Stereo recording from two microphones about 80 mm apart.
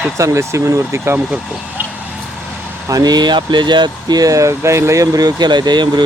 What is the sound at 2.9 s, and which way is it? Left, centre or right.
Speech, right.